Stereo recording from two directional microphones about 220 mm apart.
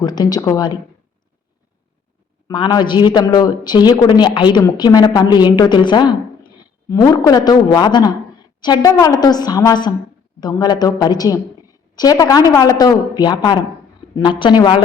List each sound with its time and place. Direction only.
0.0 s a man's voice: 20° left (ahead or behind)
2.5 s a man's voice: 20° left (ahead or behind)